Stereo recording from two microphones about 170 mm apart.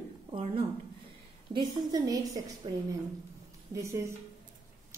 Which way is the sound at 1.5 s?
25° right (ahead or behind).